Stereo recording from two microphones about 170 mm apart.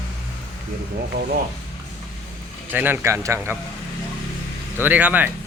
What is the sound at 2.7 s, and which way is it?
Speech, 10° right (ahead or behind).